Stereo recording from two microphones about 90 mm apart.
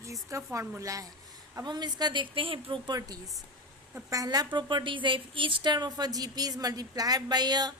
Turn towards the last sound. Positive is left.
turn(degrees=-50)  # may be behind; listen again after turning